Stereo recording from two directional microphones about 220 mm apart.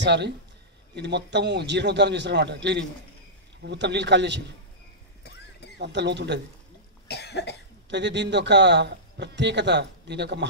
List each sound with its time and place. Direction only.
0.0 s a man's voice: 50° right (ahead or behind)
5.8 s a man's voice: 50° right (ahead or behind)
7.1 s cough: 50° left (ahead or behind)
7.9 s a man's voice: 55° right (ahead or behind)